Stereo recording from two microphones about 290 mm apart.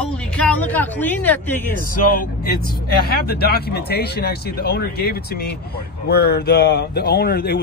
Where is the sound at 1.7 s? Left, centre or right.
Left.